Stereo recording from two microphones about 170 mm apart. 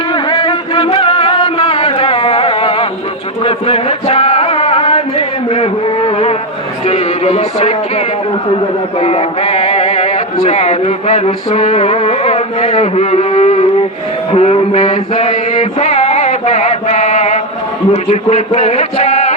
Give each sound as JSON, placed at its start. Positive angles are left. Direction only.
{"t": 0.1, "sound": "music", "side_deg": 30}
{"t": 3.4, "sound": "a sound", "side_deg": 35}
{"t": 6.8, "sound": "music", "side_deg": 40}
{"t": 9.0, "sound": "a sound", "side_deg": 35}
{"t": 10.4, "sound": "music", "side_deg": 40}
{"t": 14.3, "sound": "mantra", "side_deg": 40}
{"t": 17.9, "sound": "a man's voice", "side_deg": 40}